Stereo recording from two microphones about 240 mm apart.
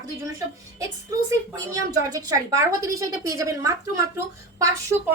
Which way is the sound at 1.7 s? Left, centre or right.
Centre.